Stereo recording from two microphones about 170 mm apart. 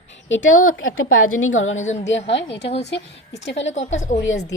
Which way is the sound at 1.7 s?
45° left (ahead or behind).